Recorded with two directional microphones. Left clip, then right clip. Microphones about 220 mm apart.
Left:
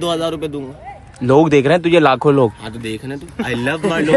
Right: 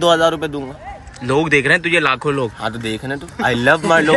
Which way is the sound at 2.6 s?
15° right (ahead or behind).